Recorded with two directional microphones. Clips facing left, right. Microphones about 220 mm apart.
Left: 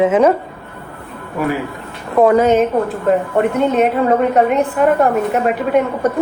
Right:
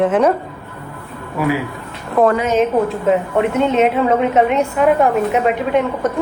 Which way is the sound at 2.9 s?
Centre (ahead or behind).